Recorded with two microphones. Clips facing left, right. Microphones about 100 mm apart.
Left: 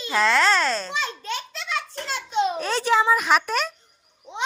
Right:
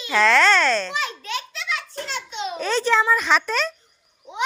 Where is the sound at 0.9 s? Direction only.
30° left (ahead or behind).